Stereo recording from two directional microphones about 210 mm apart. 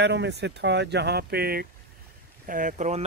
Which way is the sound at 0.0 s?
55° right (ahead or behind).